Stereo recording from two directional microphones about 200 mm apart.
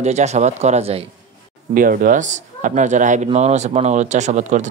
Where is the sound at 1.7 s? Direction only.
45° right (ahead or behind).